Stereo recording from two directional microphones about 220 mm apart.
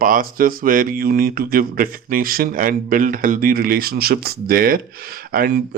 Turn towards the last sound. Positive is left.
turn(degrees=-45)  # may be behind; listen again after turning